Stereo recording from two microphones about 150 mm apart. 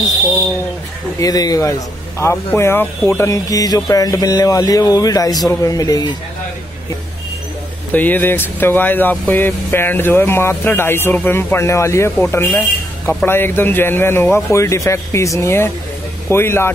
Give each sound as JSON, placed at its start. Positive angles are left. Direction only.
{"t": 1.2, "sound": "speech", "side_deg": 25}
{"t": 7.9, "sound": "speech", "side_deg": 10}